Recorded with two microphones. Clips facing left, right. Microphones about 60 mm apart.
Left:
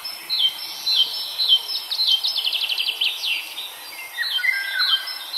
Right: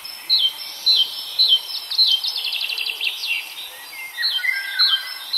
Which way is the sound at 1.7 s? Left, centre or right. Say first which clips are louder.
Right 2 dB; right.